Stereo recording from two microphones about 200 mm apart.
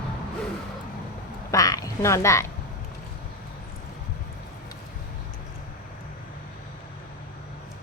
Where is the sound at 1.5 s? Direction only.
15° left (ahead or behind).